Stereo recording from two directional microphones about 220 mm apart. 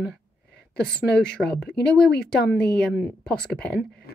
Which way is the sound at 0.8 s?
5° left (ahead or behind).